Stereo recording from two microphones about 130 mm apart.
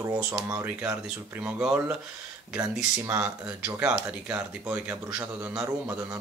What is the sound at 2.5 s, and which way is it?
Speech, 20° right (ahead or behind).